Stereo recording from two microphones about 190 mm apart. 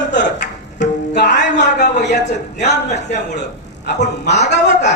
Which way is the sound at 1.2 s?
65° left (ahead or behind).